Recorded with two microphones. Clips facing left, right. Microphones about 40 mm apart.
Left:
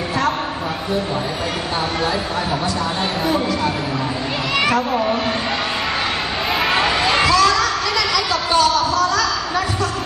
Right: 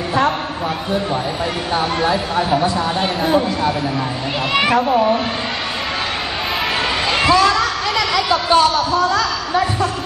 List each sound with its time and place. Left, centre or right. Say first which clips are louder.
2.0 s speech: right 4 dB; centre
4.9 s speech: right 4 dB; centre
7.2 s a sound: right 4 dB; right